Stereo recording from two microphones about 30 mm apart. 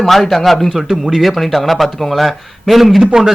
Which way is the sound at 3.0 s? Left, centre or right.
Right.